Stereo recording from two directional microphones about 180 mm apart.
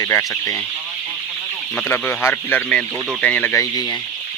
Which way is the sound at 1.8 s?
10° left (ahead or behind).